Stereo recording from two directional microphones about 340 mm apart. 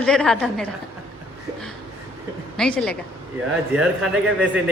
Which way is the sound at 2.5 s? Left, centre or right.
Centre.